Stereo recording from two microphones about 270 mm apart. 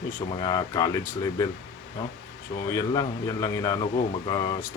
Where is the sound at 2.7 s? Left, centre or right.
Centre.